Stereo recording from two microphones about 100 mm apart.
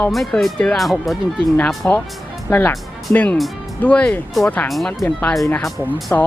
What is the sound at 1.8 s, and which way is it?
Speech, 20° left (ahead or behind).